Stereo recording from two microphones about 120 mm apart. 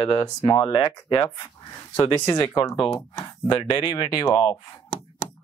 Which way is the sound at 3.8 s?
30° left (ahead or behind).